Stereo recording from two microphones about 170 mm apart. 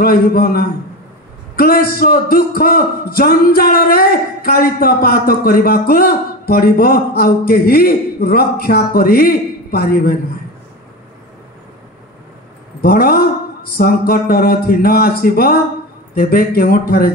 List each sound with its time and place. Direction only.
0.0 s a man's voice: 60° left (ahead or behind)
12.8 s a man's voice: 60° left (ahead or behind)